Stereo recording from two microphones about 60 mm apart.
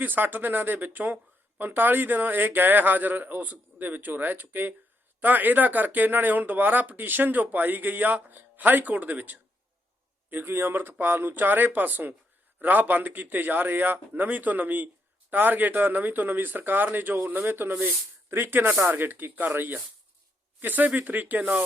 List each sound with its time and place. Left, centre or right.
0.0 s speech: right